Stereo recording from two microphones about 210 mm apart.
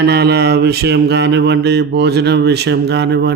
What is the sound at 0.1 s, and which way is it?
Speech, 50° right (ahead or behind).